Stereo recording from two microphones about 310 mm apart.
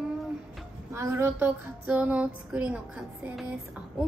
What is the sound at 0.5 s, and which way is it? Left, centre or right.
Music, centre.